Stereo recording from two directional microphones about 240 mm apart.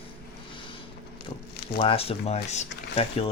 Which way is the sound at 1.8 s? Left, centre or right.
Left.